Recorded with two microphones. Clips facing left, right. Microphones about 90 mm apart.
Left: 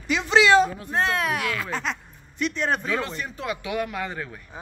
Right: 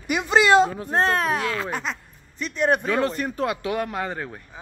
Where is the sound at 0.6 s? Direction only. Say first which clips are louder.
Right 2 dB; 35° right (ahead or behind).